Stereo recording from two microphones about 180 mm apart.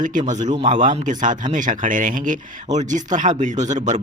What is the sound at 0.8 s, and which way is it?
Speech, 45° right (ahead or behind).